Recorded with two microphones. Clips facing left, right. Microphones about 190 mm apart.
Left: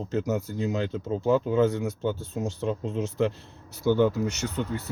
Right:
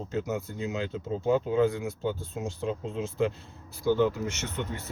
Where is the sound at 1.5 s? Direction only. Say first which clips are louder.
Left 2 dB; 70° left (ahead or behind).